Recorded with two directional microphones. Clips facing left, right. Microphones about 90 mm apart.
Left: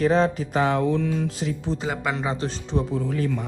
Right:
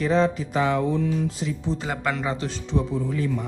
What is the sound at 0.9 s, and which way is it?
Music, 80° left.